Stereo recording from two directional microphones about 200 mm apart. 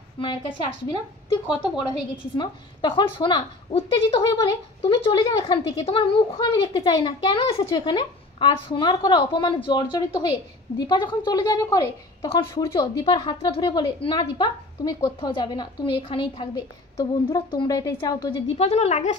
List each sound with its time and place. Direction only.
0.2 s a woman's voice: 25° left (ahead or behind)
2.3 s a woman's voice: 20° left (ahead or behind)
18.6 s speech: 35° left (ahead or behind)